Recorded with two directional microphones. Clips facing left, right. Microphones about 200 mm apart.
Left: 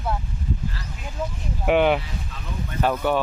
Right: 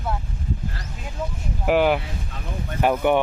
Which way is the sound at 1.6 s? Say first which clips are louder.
Even; centre (ahead or behind).